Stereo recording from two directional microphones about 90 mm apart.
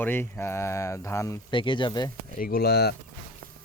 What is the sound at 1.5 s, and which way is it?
Speech, 65° left (ahead or behind).